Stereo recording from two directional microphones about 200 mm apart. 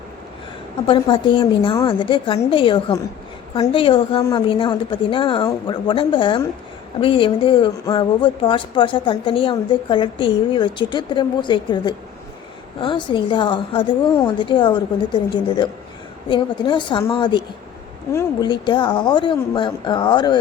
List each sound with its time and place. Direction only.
0.9 s speech: 25° left (ahead or behind)